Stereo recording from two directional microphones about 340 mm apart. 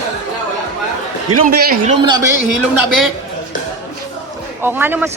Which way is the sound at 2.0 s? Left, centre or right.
Centre.